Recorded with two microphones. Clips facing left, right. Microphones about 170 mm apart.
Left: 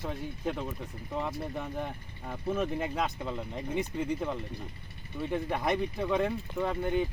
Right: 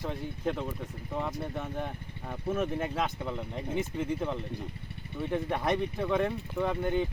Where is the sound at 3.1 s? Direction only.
15° left (ahead or behind).